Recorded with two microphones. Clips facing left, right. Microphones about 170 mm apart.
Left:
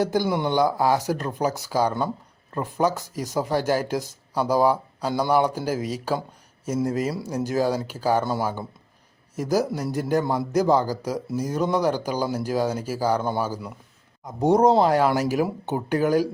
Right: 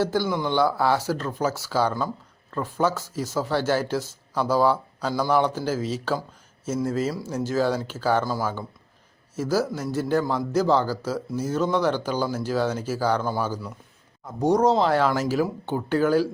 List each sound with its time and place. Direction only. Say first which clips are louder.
0.0 s a man's voice: left 1 dB; 15° left (ahead or behind)
8.2 s a man's voice: left 1 dB; 25° left (ahead or behind); by 13.7 s 10° left (ahead or behind)
14.3 s a man's voice: left 2 dB; 20° left (ahead or behind)